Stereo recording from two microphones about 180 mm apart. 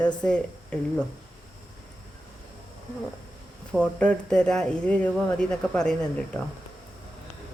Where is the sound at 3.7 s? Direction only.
5° left (ahead or behind).